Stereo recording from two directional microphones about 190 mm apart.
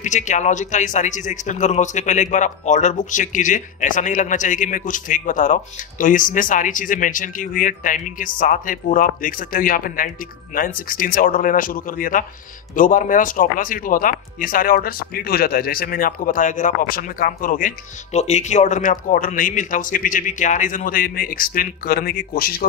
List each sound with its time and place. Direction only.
0.0 s a man's voice: 40° left (ahead or behind)